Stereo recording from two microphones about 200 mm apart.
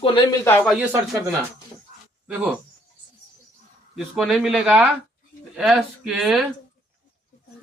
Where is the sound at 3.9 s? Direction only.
Centre (ahead or behind).